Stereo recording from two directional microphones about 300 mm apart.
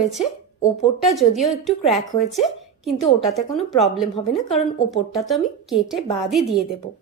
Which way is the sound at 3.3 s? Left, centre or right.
Centre.